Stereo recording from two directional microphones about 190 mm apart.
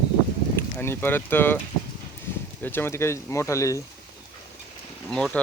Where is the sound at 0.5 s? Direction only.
10° left (ahead or behind).